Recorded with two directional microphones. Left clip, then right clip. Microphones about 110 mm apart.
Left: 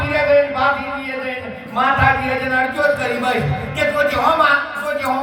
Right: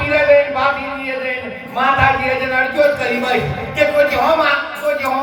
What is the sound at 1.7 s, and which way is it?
Speech, 20° right (ahead or behind).